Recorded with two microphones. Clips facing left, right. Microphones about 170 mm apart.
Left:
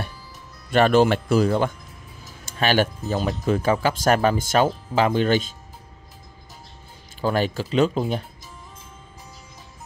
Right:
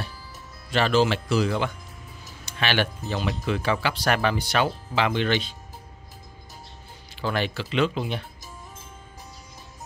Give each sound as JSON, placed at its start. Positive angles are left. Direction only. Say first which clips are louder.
{"t": 0.7, "sound": "speech", "louder": "left 5 dB", "side_deg": 55}
{"t": 7.2, "sound": "speech", "louder": "left 5 dB", "side_deg": 40}